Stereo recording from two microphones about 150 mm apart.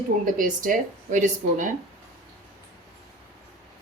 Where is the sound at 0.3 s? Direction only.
65° right (ahead or behind).